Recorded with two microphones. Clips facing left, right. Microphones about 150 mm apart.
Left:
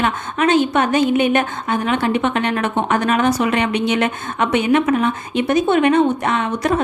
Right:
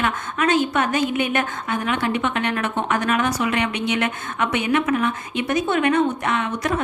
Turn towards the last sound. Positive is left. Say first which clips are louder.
# left 4 dB
turn(degrees=30)  # may be behind; listen again after turning